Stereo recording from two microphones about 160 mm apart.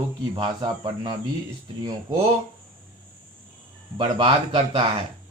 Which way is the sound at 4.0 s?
30° right (ahead or behind).